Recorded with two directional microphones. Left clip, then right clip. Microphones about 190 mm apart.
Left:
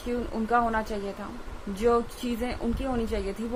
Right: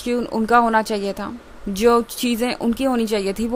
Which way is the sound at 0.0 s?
55° right (ahead or behind).